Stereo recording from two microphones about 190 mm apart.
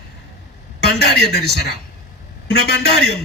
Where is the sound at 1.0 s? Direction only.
60° left (ahead or behind).